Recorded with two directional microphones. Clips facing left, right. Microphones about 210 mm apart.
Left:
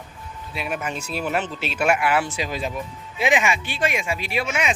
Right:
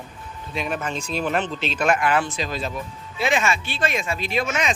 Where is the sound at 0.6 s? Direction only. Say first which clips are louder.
Right 1 dB; 10° left (ahead or behind).